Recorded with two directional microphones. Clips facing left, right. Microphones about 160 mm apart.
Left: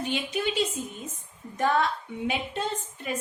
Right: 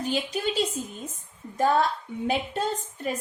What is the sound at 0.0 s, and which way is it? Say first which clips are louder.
Speech: right 1 dB; 35° right (ahead or behind).